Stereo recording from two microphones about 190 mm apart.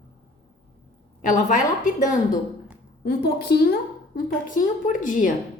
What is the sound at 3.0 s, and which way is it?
Speech, 55° left (ahead or behind).